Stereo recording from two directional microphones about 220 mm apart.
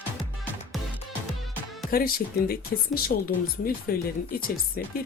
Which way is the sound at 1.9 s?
40° left (ahead or behind).